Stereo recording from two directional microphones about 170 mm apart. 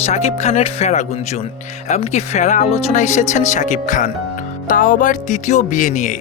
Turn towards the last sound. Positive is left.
turn(degrees=50)  # may be behind; listen again after turning